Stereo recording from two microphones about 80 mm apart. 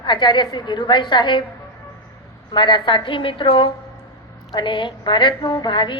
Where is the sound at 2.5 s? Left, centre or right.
Left.